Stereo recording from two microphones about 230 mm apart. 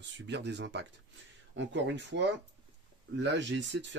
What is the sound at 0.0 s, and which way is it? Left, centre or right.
Speech, right.